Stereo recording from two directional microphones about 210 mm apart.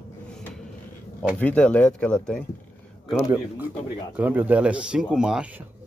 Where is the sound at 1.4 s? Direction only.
5° left (ahead or behind).